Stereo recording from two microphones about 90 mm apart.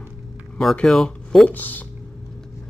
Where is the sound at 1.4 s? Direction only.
20° left (ahead or behind).